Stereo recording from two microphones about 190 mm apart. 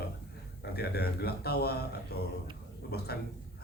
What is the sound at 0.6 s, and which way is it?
Speech, 60° left (ahead or behind).